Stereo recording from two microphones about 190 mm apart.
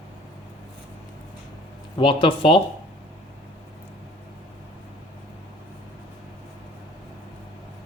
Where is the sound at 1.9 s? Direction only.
25° left (ahead or behind).